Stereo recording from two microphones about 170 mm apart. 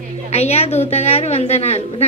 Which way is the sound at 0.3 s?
35° left (ahead or behind).